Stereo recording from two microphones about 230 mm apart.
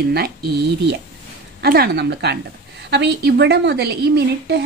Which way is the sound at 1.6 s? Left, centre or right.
Right.